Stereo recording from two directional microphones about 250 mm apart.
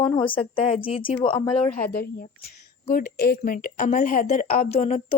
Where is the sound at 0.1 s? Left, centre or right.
Centre.